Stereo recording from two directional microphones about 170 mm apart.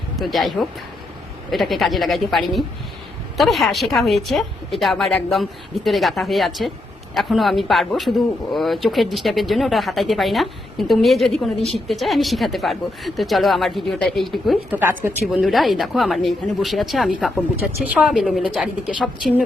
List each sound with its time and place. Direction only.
0.2 s speech: centre (ahead or behind)
14.8 s a woman's voice: 15° right (ahead or behind)
15.4 s speech: centre (ahead or behind)